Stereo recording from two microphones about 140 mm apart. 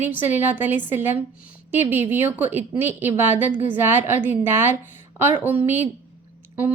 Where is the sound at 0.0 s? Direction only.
15° right (ahead or behind).